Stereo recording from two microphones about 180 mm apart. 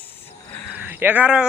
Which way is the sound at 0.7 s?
10° right (ahead or behind).